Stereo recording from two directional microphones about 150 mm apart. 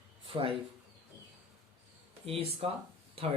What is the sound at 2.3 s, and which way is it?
Speech, 40° right (ahead or behind).